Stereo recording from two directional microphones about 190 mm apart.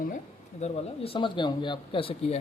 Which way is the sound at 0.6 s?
30° left (ahead or behind).